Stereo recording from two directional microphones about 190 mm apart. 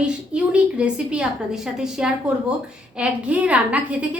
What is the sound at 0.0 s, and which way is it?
A woman's voice, 5° right (ahead or behind).